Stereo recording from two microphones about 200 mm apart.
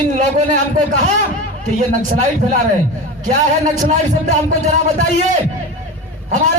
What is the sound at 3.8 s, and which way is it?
A man's voice, 40° right (ahead or behind).